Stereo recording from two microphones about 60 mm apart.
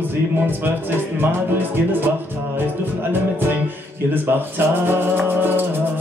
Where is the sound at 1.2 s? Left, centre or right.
Right.